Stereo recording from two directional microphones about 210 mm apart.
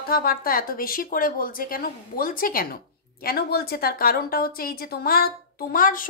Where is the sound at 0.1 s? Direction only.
45° left (ahead or behind).